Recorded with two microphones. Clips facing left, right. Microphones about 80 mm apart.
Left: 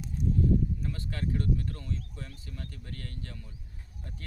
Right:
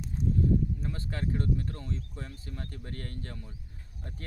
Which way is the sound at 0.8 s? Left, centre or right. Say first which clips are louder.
Even; right.